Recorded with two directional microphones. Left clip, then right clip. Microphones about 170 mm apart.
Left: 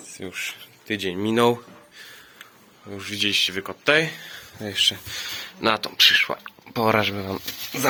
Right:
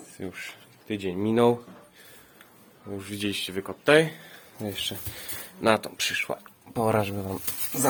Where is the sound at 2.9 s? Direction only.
15° right (ahead or behind).